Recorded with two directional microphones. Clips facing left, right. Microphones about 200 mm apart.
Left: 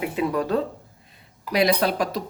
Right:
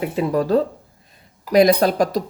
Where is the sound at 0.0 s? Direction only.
35° right (ahead or behind).